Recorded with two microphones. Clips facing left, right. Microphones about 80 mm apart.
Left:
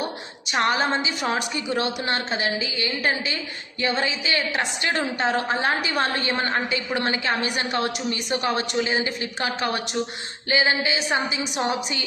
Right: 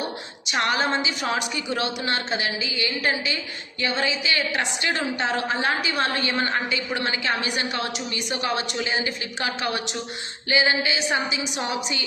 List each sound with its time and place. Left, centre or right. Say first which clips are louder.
0.6 s a woman's voice: left 1 dB; left